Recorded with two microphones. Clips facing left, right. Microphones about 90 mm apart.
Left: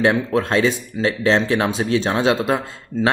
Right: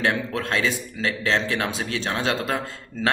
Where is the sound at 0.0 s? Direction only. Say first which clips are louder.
Left 7 dB; 25° left (ahead or behind).